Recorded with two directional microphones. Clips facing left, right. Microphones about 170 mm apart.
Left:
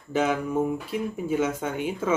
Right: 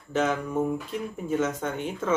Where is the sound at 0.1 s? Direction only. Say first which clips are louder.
Left 2 dB; 10° left (ahead or behind).